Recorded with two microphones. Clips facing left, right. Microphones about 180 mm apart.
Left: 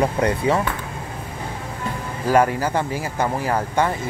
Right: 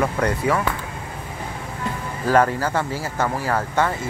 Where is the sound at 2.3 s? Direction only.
15° left (ahead or behind).